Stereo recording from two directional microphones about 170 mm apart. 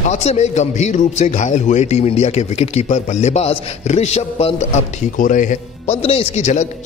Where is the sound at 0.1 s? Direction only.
40° left (ahead or behind).